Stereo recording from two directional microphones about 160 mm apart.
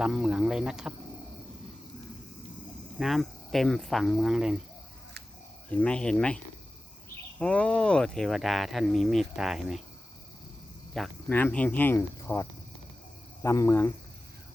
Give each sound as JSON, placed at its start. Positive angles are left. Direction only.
{"t": 0.0, "sound": "speech", "side_deg": -5}
{"t": 3.0, "sound": "speech", "side_deg": 0}
{"t": 5.7, "sound": "speech", "side_deg": 5}
{"t": 11.0, "sound": "speech", "side_deg": 0}